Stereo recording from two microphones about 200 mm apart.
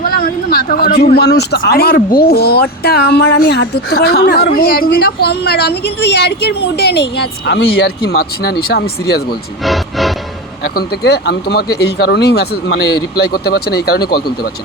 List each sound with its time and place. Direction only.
0.0 s speech: 45° left (ahead or behind)
9.6 s music: centre (ahead or behind)
10.8 s speech: 55° left (ahead or behind)